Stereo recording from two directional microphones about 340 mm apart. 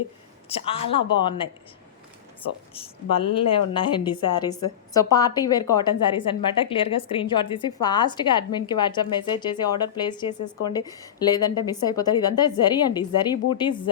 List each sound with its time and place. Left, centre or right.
0.4 s a woman's voice: centre
3.5 s a woman's voice: centre